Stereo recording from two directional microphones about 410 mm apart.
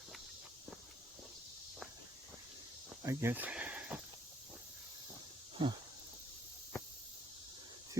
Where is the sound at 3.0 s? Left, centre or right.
Centre.